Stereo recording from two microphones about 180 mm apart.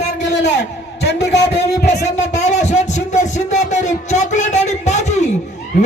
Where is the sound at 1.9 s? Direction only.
40° left (ahead or behind).